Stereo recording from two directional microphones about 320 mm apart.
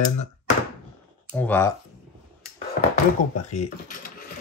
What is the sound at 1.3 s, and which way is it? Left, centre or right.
Speech, centre.